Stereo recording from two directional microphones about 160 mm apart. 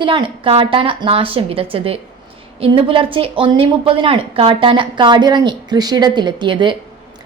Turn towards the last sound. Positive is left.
turn(degrees=-30)  # may be behind; listen again after turning